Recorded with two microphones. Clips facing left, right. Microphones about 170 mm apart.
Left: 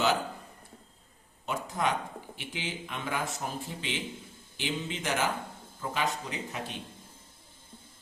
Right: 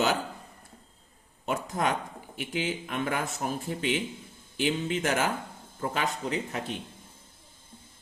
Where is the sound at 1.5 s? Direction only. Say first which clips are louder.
Right 2 dB; 45° right (ahead or behind).